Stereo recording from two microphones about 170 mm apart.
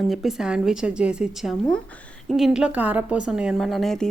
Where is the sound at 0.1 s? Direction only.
Centre (ahead or behind).